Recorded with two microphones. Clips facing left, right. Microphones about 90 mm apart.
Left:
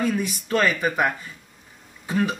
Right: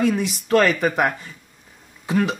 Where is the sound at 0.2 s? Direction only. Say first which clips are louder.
Right 5 dB; 90° right.